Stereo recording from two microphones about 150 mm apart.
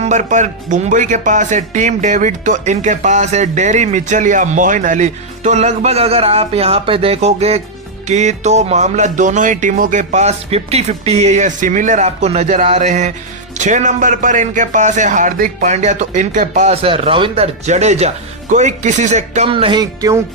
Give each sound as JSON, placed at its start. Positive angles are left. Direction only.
{"t": 0.0, "sound": "speech", "side_deg": -50}
{"t": 19.5, "sound": "music", "side_deg": -35}
{"t": 19.8, "sound": "music", "side_deg": -25}